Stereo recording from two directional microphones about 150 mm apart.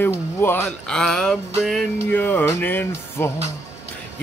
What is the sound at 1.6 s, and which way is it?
Music, centre (ahead or behind).